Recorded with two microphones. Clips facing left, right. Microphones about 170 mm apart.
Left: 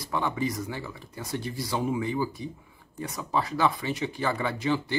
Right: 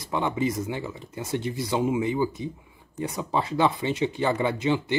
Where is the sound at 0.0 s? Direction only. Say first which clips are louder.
Right 3 dB; 20° right (ahead or behind).